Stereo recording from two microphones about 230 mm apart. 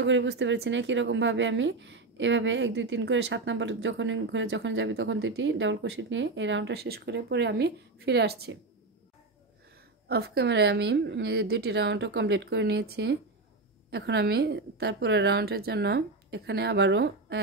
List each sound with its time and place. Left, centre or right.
0.0 s speech: right
10.0 s speech: right